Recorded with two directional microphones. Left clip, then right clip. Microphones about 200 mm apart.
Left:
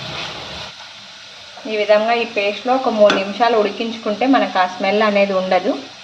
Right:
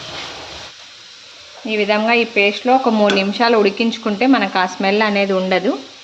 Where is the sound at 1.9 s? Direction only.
55° right (ahead or behind); by 5.6 s 30° right (ahead or behind).